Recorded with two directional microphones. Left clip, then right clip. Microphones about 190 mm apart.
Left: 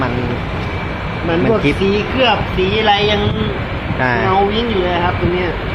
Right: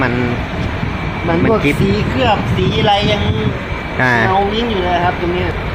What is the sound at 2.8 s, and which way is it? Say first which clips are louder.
Speech: even; 30° right (ahead or behind).